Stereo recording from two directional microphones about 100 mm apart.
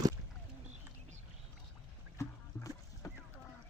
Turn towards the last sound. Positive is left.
turn(degrees=30)  # may be behind; listen again after turning